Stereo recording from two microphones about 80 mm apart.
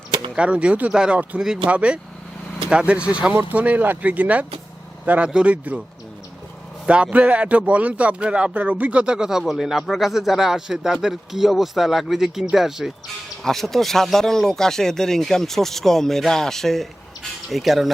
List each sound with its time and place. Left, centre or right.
0.3 s speech: centre
6.8 s speech: centre